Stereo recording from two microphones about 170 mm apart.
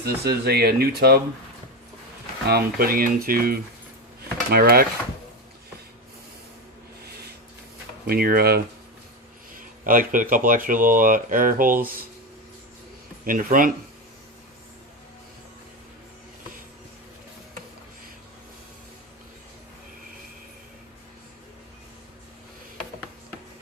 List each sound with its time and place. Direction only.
0.0 s speech: 70° right (ahead or behind)
2.5 s speech: 65° right (ahead or behind)
8.0 s speech: 60° right (ahead or behind)
9.6 s speech: 55° right (ahead or behind)
13.2 s speech: 55° right (ahead or behind)